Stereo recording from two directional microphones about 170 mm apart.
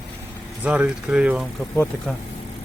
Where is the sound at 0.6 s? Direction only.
10° right (ahead or behind).